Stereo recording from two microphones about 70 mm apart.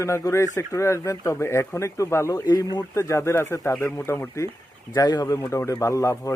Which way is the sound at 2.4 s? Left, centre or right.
Left.